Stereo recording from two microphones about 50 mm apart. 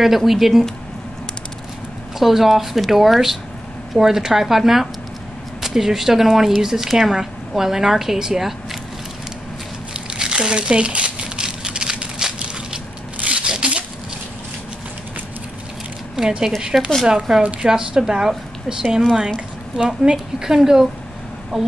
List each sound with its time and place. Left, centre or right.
0.0 s speech: centre
2.1 s speech: centre
9.9 s crumpling: centre
13.2 s zipper: right
16.2 s speech: centre
20.1 s speech: centre